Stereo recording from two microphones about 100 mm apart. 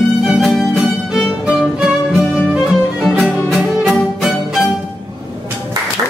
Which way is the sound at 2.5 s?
5° right (ahead or behind).